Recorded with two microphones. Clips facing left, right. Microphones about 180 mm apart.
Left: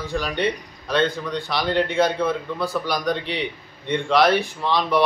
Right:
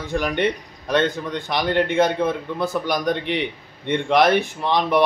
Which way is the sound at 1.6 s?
55° right (ahead or behind).